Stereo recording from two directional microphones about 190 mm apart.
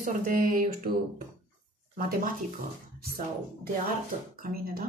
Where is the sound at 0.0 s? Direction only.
45° right (ahead or behind).